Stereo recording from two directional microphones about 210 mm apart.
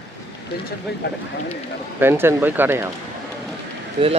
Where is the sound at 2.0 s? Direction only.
10° right (ahead or behind).